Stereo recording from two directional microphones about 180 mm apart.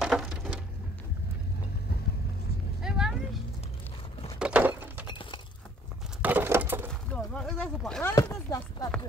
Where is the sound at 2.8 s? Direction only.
5° right (ahead or behind).